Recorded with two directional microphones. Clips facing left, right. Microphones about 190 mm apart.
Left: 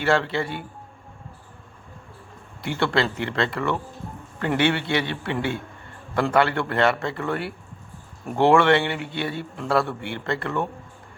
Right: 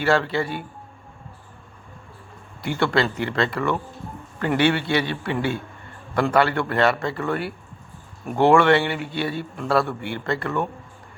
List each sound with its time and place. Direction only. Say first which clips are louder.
0.0 s a man's voice: right 1 dB; 25° left (ahead or behind)
2.6 s a man's voice: right 2 dB; 25° left (ahead or behind)